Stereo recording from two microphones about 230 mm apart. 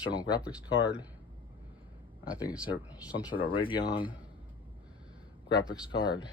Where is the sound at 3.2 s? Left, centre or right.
Left.